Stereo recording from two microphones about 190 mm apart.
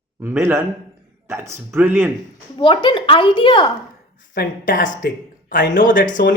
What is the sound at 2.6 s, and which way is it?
Speech, 25° left (ahead or behind).